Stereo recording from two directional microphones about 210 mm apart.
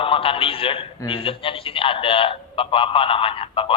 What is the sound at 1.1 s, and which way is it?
A man's voice, 25° left (ahead or behind).